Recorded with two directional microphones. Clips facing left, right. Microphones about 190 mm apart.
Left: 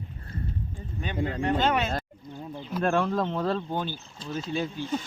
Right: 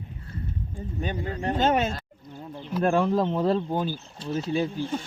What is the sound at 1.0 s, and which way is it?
Speech, 45° right (ahead or behind).